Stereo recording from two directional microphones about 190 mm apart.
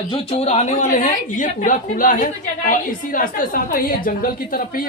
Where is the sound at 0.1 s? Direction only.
30° left (ahead or behind).